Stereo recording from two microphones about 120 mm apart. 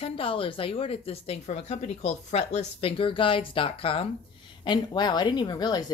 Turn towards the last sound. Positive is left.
turn(degrees=35)  # may be behind; listen again after turning